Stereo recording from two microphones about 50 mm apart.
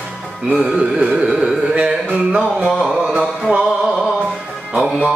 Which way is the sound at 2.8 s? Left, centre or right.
Centre.